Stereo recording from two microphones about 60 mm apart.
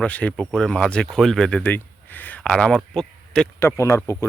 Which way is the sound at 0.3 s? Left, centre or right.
Centre.